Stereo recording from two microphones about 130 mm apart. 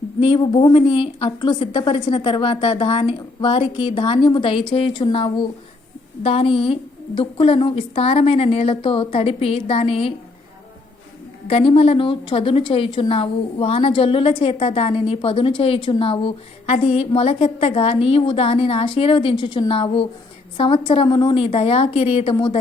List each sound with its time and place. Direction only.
0.2 s a woman's voice: 40° left (ahead or behind)
11.4 s a woman's voice: 45° left (ahead or behind)